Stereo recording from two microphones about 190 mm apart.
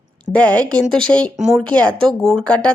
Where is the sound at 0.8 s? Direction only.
5° left (ahead or behind).